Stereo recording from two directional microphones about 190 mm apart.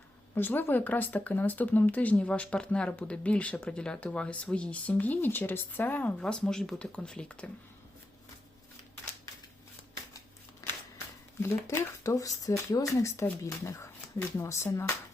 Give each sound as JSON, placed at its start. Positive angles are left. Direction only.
{"t": 0.3, "sound": "speech", "side_deg": 10}
{"t": 10.6, "sound": "a sound", "side_deg": 15}
{"t": 11.4, "sound": "speech", "side_deg": 15}